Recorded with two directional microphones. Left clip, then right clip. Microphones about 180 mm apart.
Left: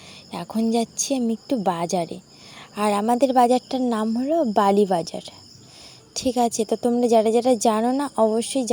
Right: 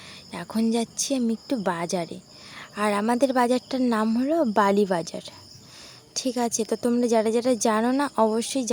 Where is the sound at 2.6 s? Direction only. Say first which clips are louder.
Left 3 dB; 5° left (ahead or behind).